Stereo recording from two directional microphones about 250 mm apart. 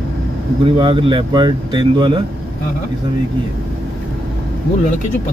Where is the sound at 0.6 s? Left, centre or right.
Right.